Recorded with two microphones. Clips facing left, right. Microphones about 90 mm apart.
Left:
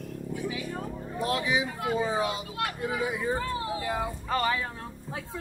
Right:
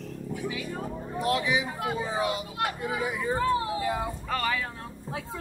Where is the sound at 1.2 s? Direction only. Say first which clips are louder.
Right 1 dB; 35° left (ahead or behind).